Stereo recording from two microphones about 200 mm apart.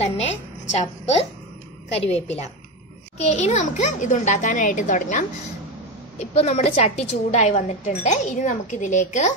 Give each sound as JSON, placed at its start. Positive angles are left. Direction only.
{"t": 0.0, "sound": "a woman's voice", "side_deg": 30}